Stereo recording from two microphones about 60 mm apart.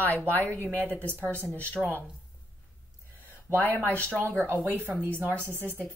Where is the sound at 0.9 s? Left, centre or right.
Left.